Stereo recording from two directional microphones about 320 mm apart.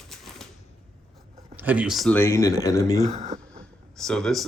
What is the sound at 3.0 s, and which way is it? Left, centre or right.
Speech, right.